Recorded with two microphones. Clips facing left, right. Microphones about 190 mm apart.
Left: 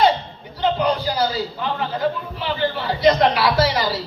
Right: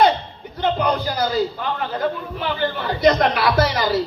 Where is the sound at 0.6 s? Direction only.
50° right (ahead or behind).